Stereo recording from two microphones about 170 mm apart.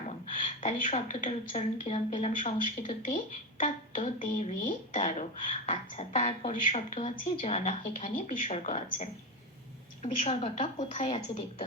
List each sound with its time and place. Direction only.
0.3 s a woman's voice: 40° left (ahead or behind)
2.4 s a woman's voice: 50° left (ahead or behind)